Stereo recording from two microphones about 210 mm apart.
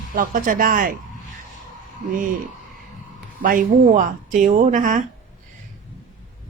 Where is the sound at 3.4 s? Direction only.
40° right (ahead or behind).